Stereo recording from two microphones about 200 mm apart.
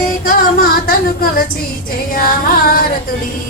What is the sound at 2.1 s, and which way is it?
Music, 45° left (ahead or behind).